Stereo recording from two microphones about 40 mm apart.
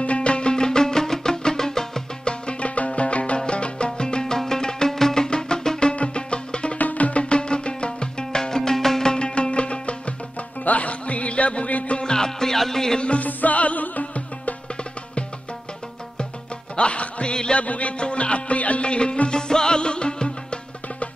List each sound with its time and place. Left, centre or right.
0.0 s music: left; by 2.0 s centre
2.2 s music: left
6.8 s music: left
12.0 s music: centre
13.0 s music: left
16.7 s music: left